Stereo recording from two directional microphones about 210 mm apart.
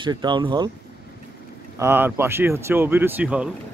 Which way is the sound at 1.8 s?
10° right (ahead or behind).